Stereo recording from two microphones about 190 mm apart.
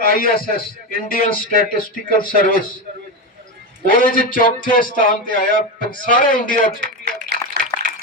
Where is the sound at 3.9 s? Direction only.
50° left (ahead or behind).